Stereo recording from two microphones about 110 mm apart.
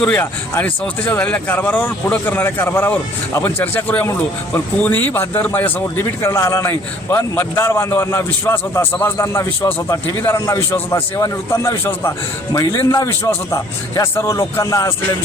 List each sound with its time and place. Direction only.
0.0 s speech: 10° left (ahead or behind); by 14.9 s 30° left (ahead or behind)